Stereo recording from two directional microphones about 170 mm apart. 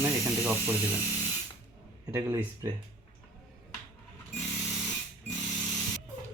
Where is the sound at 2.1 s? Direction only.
20° right (ahead or behind).